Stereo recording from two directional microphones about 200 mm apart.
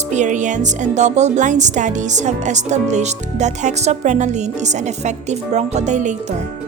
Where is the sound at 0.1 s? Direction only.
35° right (ahead or behind).